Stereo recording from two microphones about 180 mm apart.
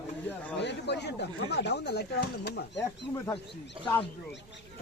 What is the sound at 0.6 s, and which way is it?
Speech, 70° left (ahead or behind).